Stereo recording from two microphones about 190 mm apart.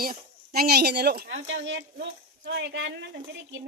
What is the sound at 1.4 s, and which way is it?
Speech, 80° right.